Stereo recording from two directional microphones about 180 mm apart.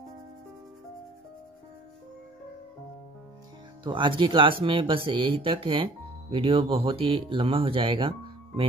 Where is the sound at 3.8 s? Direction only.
25° right (ahead or behind).